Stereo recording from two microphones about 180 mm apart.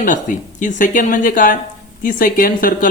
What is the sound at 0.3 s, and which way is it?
Speech, 45° left (ahead or behind).